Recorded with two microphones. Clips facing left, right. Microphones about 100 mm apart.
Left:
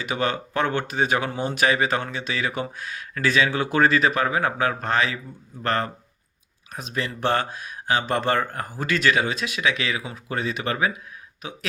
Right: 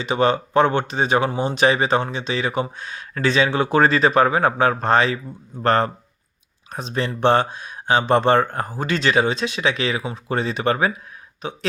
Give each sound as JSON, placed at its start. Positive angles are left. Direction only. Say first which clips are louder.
{"t": 0.0, "sound": "speech", "louder": "right 7 dB", "side_deg": -25}